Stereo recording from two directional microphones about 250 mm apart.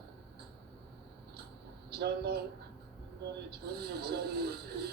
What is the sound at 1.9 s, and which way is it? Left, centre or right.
Speech, right.